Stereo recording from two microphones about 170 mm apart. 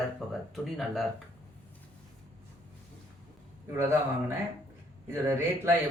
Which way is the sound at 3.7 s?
15° right (ahead or behind).